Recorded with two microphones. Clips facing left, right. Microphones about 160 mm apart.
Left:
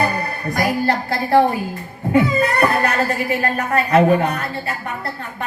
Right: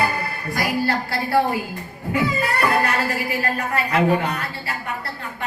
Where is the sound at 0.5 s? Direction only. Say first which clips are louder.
Left 3 dB; 45° left (ahead or behind).